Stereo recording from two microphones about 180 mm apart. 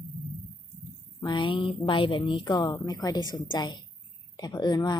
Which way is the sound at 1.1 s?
25° left (ahead or behind).